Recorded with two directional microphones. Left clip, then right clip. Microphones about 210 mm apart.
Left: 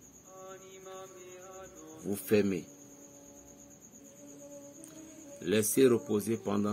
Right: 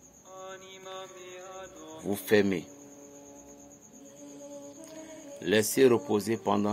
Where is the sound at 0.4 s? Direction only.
25° right (ahead or behind).